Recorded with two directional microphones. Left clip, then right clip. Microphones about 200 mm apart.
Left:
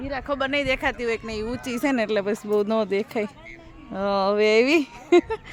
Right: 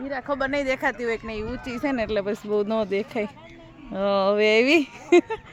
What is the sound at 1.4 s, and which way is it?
Speech, 45° left (ahead or behind).